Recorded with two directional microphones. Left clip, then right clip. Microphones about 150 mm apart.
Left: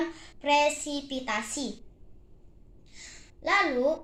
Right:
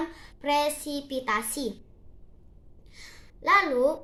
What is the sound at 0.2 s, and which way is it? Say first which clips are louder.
A child's voice: left 2 dB; 60° right (ahead or behind).